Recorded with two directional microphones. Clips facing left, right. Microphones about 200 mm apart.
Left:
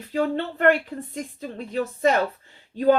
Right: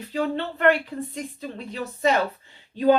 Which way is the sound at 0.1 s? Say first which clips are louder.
Left 2 dB; 50° left (ahead or behind).